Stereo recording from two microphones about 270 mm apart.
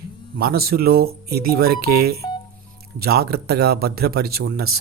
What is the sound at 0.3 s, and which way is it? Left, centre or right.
Speech, right.